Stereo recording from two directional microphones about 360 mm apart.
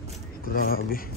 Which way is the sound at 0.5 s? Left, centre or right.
Left.